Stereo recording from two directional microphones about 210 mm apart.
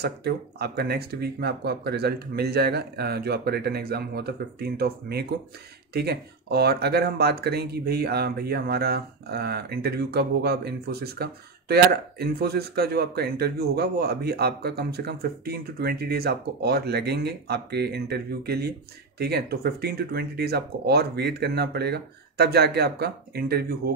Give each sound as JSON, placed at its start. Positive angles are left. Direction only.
{"t": 0.0, "sound": "speech", "side_deg": -50}